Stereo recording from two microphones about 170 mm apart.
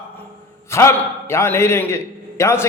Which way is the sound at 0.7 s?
15° left (ahead or behind).